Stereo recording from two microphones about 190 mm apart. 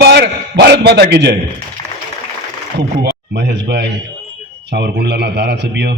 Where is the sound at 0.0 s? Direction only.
60° right (ahead or behind).